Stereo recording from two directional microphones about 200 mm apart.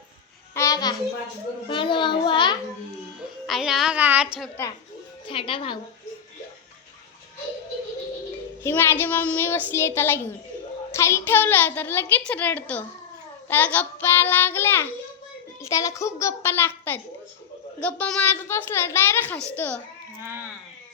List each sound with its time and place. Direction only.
0.5 s a sound: 15° left (ahead or behind)
1.6 s a child's voice: 25° left (ahead or behind)
3.4 s child singing: centre (ahead or behind)
4.4 s a woman's voice: 10° left (ahead or behind)
5.2 s a child's voice: 25° left (ahead or behind)
8.6 s a woman's voice: 10° left (ahead or behind)
20.2 s speech: 10° right (ahead or behind)